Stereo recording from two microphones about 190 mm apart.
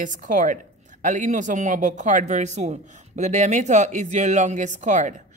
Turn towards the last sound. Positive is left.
turn(degrees=-40)  # may be behind; listen again after turning